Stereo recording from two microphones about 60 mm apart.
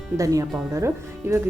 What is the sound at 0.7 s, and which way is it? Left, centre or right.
Speech, right.